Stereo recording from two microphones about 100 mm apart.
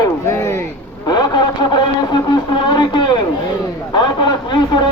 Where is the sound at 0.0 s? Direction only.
30° left (ahead or behind).